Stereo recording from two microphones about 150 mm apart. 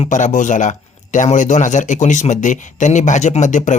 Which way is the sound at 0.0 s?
55° left (ahead or behind).